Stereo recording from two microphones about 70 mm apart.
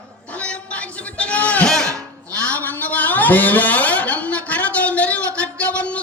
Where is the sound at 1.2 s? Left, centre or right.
Centre.